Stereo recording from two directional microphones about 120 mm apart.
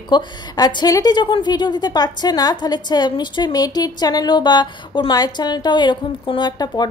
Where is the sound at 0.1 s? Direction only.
40° left (ahead or behind).